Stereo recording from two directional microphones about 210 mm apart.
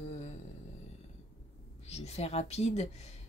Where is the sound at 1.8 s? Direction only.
30° left (ahead or behind).